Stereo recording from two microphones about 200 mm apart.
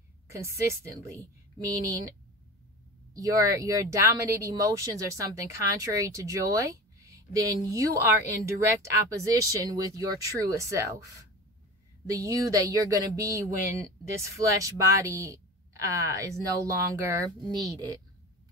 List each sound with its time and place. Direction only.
0.3 s speech: 15° right (ahead or behind)
3.2 s speech: 15° right (ahead or behind)
12.1 s speech: 15° right (ahead or behind)